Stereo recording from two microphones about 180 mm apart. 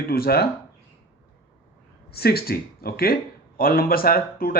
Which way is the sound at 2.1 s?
60° left (ahead or behind).